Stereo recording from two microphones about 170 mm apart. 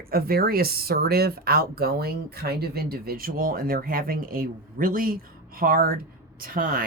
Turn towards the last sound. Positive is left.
turn(degrees=-55)  # may be behind; listen again after turning